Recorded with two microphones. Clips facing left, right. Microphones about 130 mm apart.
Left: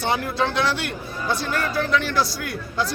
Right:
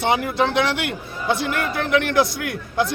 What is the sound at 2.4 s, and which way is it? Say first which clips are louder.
Speech: right 4 dB; 55° right (ahead or behind).